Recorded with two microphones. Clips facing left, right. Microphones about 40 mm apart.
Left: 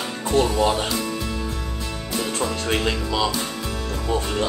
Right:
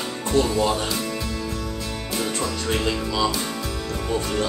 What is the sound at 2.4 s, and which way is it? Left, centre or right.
Speech, left.